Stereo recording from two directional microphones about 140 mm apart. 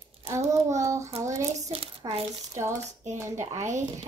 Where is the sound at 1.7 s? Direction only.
50° right (ahead or behind).